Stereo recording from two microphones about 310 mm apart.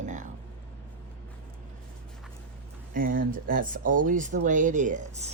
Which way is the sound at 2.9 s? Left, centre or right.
Right.